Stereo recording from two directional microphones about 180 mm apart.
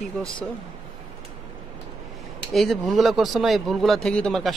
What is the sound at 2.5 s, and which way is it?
Speech, centre (ahead or behind).